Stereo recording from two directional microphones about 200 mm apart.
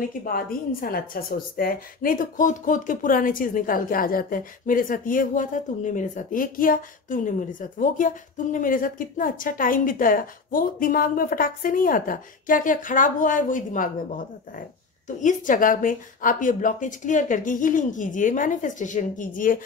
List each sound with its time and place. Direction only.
0.2 s a woman's voice: 45° left (ahead or behind)